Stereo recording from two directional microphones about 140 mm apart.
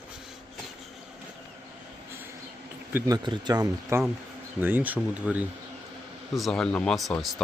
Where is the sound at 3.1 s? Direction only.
30° right (ahead or behind); by 5.5 s 10° right (ahead or behind).